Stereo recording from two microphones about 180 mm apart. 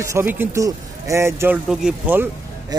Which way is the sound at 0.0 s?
15° right (ahead or behind).